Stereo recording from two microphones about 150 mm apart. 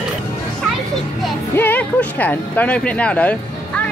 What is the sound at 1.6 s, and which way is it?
Speech, 10° left (ahead or behind).